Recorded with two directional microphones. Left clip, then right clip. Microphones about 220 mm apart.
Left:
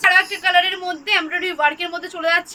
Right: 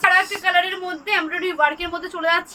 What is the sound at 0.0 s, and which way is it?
Speech, 10° right (ahead or behind).